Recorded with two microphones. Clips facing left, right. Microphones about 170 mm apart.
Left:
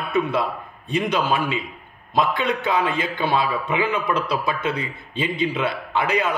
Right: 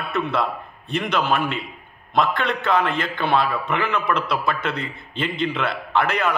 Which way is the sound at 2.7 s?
60° right (ahead or behind).